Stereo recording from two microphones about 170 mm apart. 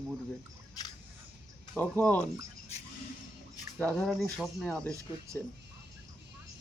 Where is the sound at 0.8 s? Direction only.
20° left (ahead or behind).